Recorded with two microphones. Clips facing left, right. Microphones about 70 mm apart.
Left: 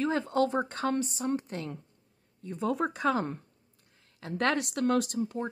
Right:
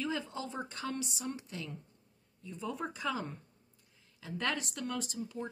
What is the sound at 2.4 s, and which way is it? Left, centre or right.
A woman's voice, left.